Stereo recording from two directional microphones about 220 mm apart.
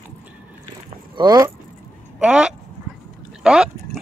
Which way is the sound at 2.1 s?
5° right (ahead or behind).